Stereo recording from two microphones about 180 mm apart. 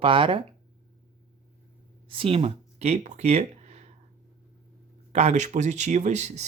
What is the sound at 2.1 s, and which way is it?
Speech, 30° right (ahead or behind).